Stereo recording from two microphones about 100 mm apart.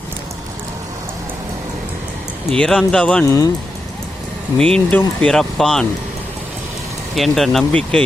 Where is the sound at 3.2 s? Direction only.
35° left (ahead or behind).